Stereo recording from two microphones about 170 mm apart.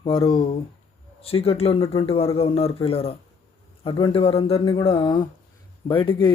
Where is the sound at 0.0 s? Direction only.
30° left (ahead or behind).